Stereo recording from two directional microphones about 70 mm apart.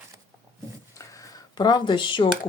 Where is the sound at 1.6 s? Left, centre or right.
Left.